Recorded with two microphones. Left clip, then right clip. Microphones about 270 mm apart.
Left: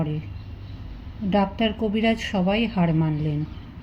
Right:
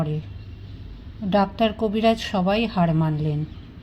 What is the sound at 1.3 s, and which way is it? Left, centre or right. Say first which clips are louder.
A woman's voice: right 2 dB; right.